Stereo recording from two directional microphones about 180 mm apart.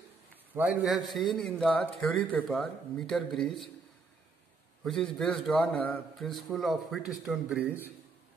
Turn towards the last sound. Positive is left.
turn(degrees=-5)  # may be behind; listen again after turning